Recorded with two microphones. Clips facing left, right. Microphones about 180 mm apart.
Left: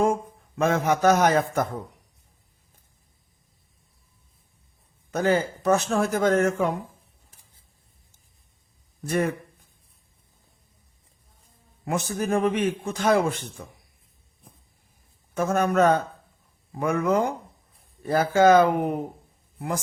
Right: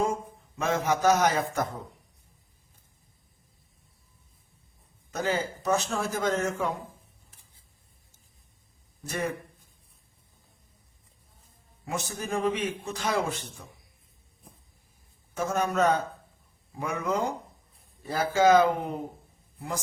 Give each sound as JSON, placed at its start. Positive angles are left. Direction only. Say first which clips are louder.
{"t": 0.0, "sound": "a man's voice", "louder": "left 6 dB", "side_deg": 55}
{"t": 5.1, "sound": "speech", "louder": "left 6 dB", "side_deg": 55}
{"t": 9.0, "sound": "speech", "louder": "left 7 dB", "side_deg": 60}
{"t": 11.9, "sound": "speech", "louder": "left 7 dB", "side_deg": 55}
{"t": 15.4, "sound": "a man's voice", "louder": "left 5 dB", "side_deg": 55}